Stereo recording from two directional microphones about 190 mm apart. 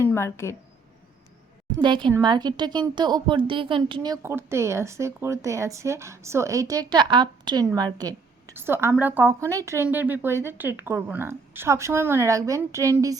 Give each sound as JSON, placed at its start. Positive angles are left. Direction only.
{"t": 0.0, "sound": "speech", "side_deg": 15}
{"t": 1.8, "sound": "a woman's voice", "side_deg": -25}